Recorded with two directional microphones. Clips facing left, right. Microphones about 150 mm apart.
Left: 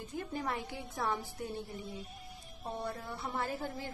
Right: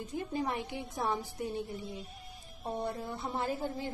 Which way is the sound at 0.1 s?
15° right (ahead or behind).